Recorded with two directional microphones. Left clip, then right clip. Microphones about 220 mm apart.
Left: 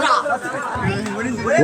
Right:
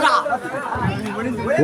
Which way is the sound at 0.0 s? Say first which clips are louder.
Even; 50° right (ahead or behind).